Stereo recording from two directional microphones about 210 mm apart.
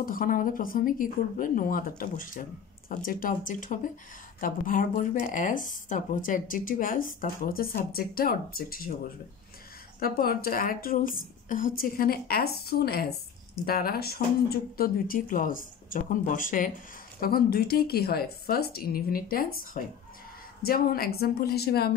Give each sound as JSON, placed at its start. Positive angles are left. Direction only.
{"t": 0.0, "sound": "speech", "side_deg": 40}
{"t": 9.9, "sound": "a woman's voice", "side_deg": 45}